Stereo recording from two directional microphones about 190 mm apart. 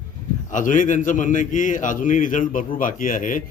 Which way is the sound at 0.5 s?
45° left (ahead or behind).